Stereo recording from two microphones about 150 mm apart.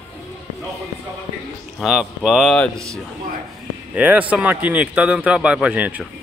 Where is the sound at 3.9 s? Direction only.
10° right (ahead or behind).